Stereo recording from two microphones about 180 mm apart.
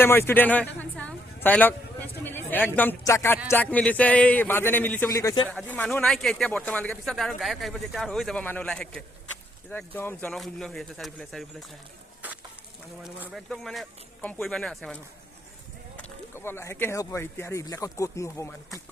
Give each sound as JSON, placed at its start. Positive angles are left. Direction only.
{"t": 0.0, "sound": "a man's voice", "side_deg": 10}
{"t": 5.5, "sound": "a man's voice", "side_deg": 10}
{"t": 13.1, "sound": "a man's voice", "side_deg": 0}
{"t": 16.3, "sound": "speech", "side_deg": 15}